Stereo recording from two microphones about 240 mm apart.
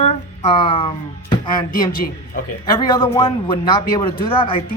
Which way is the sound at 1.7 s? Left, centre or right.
Left.